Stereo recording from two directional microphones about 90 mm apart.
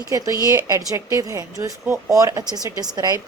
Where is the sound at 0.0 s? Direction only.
40° right (ahead or behind).